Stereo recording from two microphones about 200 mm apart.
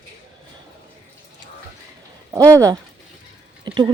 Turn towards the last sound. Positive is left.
turn(degrees=-20)  # may be behind; listen again after turning